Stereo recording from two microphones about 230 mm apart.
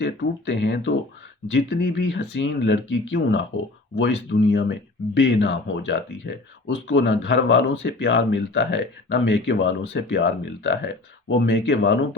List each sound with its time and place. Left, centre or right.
0.0 s speech: left